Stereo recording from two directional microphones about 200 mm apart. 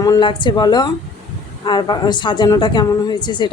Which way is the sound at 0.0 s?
20° left (ahead or behind).